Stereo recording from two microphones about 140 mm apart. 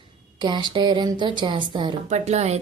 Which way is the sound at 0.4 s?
35° right (ahead or behind).